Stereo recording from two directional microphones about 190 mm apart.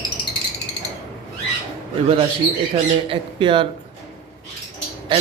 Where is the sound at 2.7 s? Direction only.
25° right (ahead or behind).